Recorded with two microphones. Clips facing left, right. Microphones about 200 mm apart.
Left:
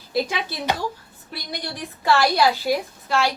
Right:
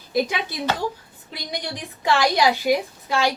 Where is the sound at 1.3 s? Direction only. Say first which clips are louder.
Right 1 dB; 15° right (ahead or behind).